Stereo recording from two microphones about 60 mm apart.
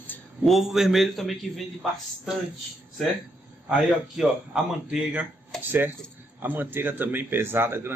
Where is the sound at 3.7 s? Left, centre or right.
Centre.